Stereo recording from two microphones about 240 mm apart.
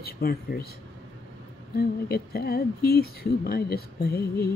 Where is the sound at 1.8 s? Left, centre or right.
Left.